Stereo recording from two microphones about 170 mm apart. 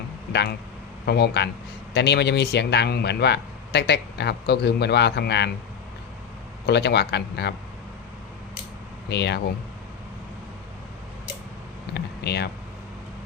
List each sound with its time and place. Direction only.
1.0 s speech: 75° left (ahead or behind)
6.7 s speech: 80° left
9.0 s speech: 80° left
11.9 s a sound: 70° left (ahead or behind)